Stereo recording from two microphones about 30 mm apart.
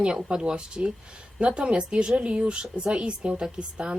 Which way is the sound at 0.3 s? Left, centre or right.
Right.